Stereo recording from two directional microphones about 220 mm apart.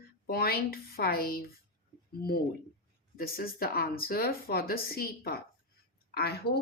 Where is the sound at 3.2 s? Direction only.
40° left (ahead or behind).